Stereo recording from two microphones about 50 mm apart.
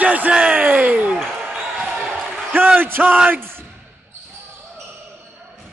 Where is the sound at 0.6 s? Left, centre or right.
Right.